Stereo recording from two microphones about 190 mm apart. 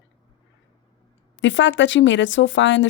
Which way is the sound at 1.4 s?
75° left (ahead or behind).